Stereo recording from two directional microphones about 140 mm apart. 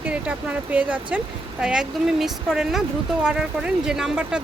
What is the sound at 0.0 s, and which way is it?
Speech, 10° right (ahead or behind).